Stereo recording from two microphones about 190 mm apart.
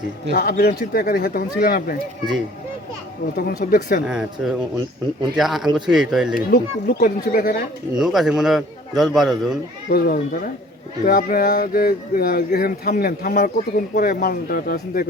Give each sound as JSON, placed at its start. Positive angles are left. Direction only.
{"t": 0.3, "sound": "speech", "side_deg": 55}
{"t": 3.3, "sound": "speech", "side_deg": 50}
{"t": 4.0, "sound": "a man's voice", "side_deg": -5}
{"t": 6.5, "sound": "speech", "side_deg": 50}
{"t": 7.9, "sound": "a man's voice", "side_deg": 0}
{"t": 9.9, "sound": "speech", "side_deg": 50}